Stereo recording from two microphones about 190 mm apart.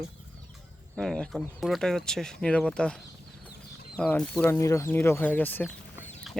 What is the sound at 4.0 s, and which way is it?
Speech, 5° left (ahead or behind).